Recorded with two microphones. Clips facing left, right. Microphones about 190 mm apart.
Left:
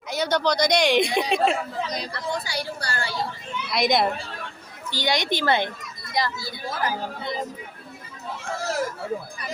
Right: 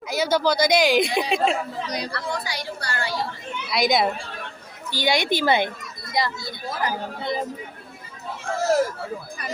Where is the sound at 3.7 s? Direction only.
Centre (ahead or behind).